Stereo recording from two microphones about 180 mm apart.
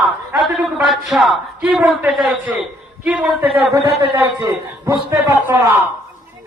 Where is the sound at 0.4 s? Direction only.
Centre (ahead or behind).